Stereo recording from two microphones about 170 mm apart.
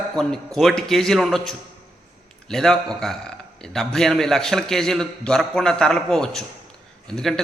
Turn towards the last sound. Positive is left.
turn(degrees=5)  # may be behind; listen again after turning